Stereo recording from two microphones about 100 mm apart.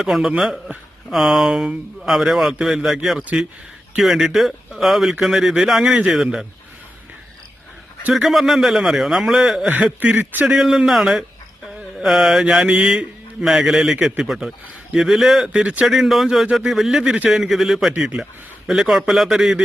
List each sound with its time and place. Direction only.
0.0 s a man's voice: 5° right (ahead or behind)
8.1 s a man's voice: centre (ahead or behind)
9.6 s a man's voice: 15° right (ahead or behind)
10.4 s a man's voice: 5° right (ahead or behind)